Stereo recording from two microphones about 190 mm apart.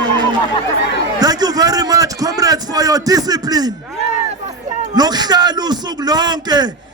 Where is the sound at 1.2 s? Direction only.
20° right (ahead or behind).